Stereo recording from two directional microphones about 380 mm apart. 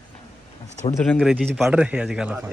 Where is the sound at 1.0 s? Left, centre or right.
Centre.